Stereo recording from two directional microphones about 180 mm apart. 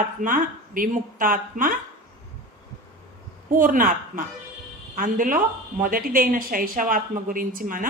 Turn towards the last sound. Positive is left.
turn(degrees=-50)  # may be behind; listen again after turning